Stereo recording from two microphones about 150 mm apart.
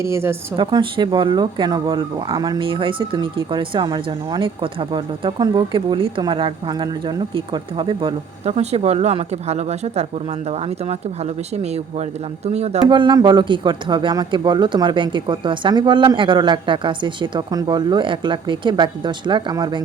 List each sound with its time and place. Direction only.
0.0 s a woman's voice: 15° right (ahead or behind)
0.5 s speech: 30° right (ahead or behind)
12.9 s speech: 30° right (ahead or behind)